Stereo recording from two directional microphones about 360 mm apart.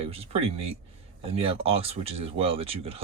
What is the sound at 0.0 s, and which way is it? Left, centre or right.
Speech, centre.